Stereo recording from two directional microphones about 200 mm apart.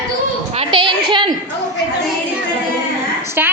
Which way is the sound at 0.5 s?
25° right (ahead or behind).